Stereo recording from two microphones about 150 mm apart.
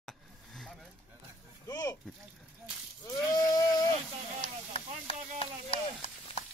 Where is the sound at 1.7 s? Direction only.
25° left (ahead or behind).